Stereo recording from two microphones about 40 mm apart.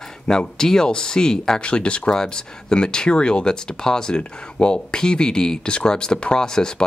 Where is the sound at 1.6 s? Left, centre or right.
Left.